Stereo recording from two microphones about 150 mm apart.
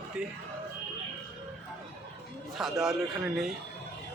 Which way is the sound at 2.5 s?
5° right (ahead or behind).